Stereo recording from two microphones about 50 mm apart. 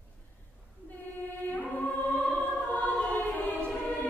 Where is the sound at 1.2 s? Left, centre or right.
Left.